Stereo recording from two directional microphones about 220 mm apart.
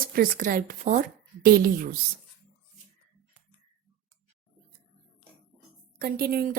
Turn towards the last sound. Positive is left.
turn(degrees=-40)  # may be behind; listen again after turning